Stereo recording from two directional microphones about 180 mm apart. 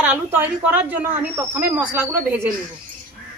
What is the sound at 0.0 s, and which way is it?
Speech, 10° right (ahead or behind).